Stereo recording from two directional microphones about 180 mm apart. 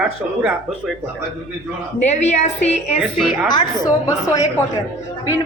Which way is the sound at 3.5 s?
20° left (ahead or behind).